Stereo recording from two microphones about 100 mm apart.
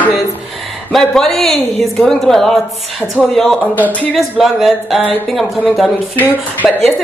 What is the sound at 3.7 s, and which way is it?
Speech, 15° left (ahead or behind).